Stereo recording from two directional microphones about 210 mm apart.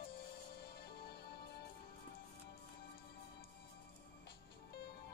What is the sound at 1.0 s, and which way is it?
Music, 50° left (ahead or behind).